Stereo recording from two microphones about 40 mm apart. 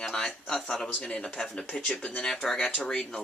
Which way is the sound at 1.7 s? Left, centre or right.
Centre.